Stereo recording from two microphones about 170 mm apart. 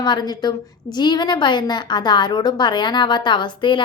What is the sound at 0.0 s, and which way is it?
A woman's voice, 25° left (ahead or behind).